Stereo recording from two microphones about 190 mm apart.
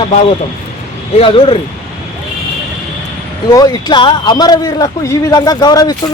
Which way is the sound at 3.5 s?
20° left (ahead or behind).